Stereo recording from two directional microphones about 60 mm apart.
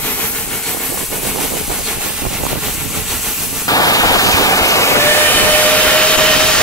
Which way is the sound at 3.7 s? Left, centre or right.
Left.